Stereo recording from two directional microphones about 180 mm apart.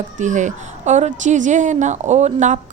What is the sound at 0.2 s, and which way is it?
A woman's voice, 45° right (ahead or behind).